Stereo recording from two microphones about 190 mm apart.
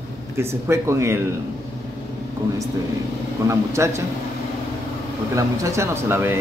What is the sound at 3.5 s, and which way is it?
Speech, 15° right (ahead or behind).